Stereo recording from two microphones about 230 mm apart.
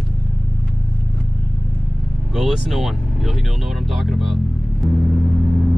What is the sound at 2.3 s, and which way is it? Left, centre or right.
Speech, centre.